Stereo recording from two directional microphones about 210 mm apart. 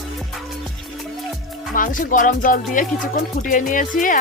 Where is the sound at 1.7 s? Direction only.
40° left (ahead or behind).